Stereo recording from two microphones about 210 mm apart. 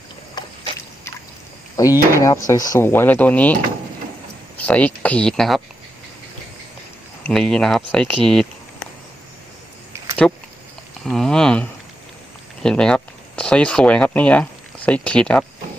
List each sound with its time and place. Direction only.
1.8 s speech: 15° left (ahead or behind)
4.6 s speech: 5° left (ahead or behind)
7.3 s speech: centre (ahead or behind)
10.2 s speech: 5° left (ahead or behind)